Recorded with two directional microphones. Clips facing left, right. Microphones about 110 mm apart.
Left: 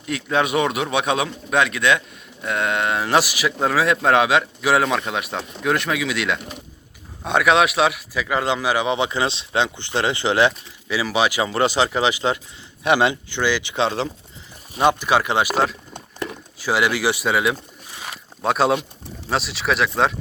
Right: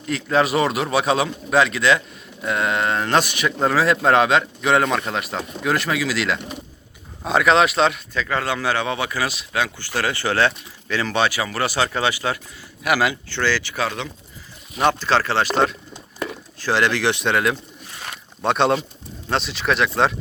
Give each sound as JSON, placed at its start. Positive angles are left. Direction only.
{"t": 0.0, "sound": "a man's voice", "side_deg": 0}
{"t": 13.3, "sound": "speech", "side_deg": 15}
{"t": 14.8, "sound": "speech", "side_deg": 15}
{"t": 18.0, "sound": "a sound", "side_deg": 5}
{"t": 19.3, "sound": "a man's voice", "side_deg": 0}